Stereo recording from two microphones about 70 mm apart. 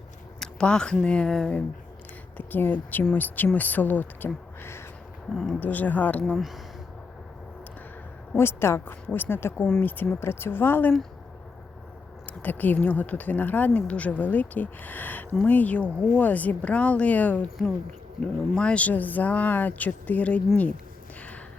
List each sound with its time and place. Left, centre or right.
0.3 s a sound: centre
1.0 s speech: centre
2.4 s speech: left
5.3 s speech: centre
5.5 s speech: left
6.3 s speech: centre
8.4 s speech: left
12.2 s speech: left